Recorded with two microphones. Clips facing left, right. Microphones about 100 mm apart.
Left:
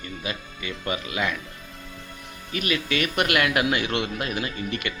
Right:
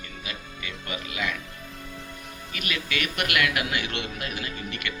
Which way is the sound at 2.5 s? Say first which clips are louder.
Left 6 dB; 30° left (ahead or behind).